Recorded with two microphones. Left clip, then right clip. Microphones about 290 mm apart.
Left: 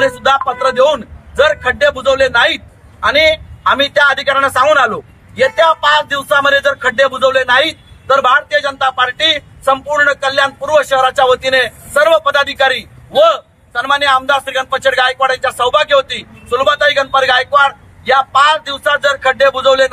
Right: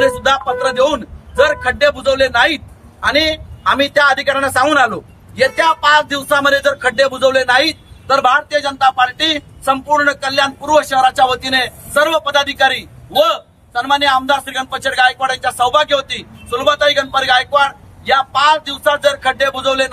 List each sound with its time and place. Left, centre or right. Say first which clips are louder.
0.0 s a man's voice: left 1 dB; centre